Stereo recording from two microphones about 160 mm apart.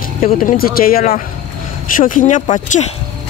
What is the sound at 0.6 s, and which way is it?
Speech, 65° left (ahead or behind).